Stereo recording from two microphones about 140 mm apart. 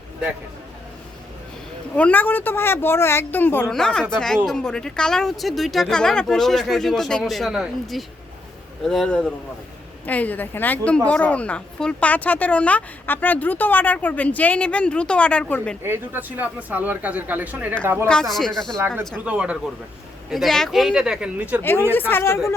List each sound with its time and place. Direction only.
2.0 s a woman's voice: 10° left (ahead or behind)
15.8 s speech: 15° right (ahead or behind)
18.1 s speech: 5° left (ahead or behind)
18.9 s speech: 10° right (ahead or behind)
22.1 s a woman's voice: 15° left (ahead or behind)